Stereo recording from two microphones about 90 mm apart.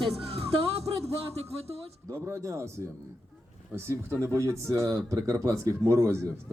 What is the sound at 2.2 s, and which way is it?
Speech, 30° right (ahead or behind).